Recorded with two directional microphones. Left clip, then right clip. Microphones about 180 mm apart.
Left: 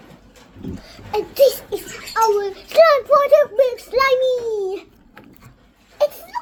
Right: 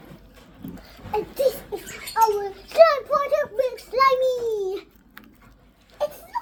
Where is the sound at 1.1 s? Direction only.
25° left (ahead or behind).